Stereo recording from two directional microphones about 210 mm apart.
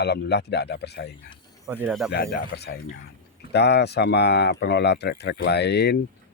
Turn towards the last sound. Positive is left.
turn(degrees=55)  # may be behind; listen again after turning